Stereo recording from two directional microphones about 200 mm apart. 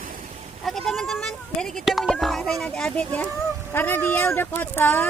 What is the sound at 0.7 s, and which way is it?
Speech, centre (ahead or behind).